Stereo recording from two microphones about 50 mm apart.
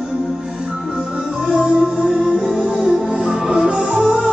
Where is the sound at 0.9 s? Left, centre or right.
Centre.